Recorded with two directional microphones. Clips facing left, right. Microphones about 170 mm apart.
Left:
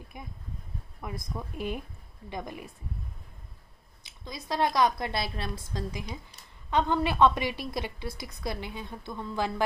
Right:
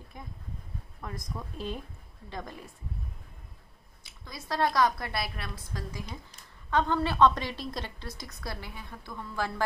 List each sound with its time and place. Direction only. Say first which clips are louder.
0.1 s a woman's voice: even; 15° left (ahead or behind)
4.0 s a woman's voice: left 4 dB; 20° left (ahead or behind)
5.9 s a woman's voice: left 3 dB; 15° left (ahead or behind)